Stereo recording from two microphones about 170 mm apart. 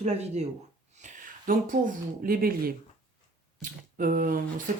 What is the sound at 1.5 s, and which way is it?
Speech, 55° right (ahead or behind).